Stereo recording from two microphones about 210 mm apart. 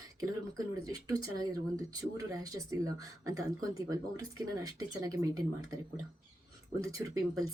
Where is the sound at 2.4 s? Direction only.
15° right (ahead or behind).